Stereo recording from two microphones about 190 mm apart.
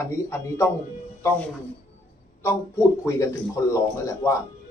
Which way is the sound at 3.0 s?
15° left (ahead or behind).